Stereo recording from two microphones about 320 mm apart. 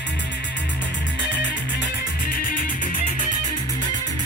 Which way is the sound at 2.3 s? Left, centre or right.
Left.